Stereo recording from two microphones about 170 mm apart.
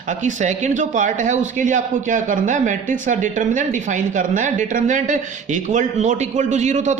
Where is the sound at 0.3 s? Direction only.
45° right (ahead or behind).